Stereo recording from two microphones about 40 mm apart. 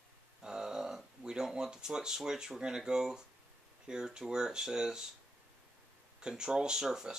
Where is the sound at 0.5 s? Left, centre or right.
Centre.